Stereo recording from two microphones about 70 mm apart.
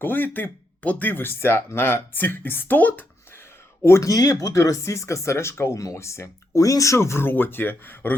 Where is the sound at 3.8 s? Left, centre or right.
Left.